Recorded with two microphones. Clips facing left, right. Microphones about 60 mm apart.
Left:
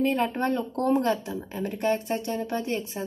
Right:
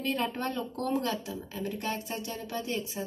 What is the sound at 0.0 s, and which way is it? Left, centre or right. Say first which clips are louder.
Speech: left 7 dB; left.